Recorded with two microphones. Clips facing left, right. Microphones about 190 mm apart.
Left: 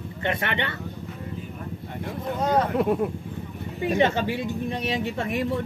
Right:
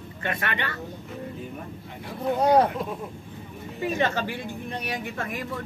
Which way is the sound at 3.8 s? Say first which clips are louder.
Left 4 dB; 20° left (ahead or behind).